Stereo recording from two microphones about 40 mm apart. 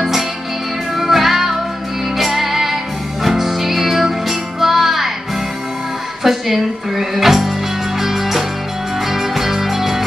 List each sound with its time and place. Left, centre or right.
0.9 s music: centre
6.2 s music: centre